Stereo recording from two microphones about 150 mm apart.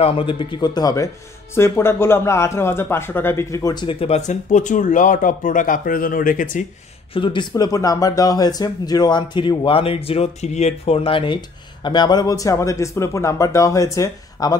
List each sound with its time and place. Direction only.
0.0 s speech: 35° left (ahead or behind); by 6.6 s 60° left (ahead or behind)
7.2 s speech: 30° left (ahead or behind)